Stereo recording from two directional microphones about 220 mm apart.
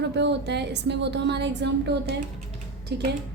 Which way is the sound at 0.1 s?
50° right (ahead or behind).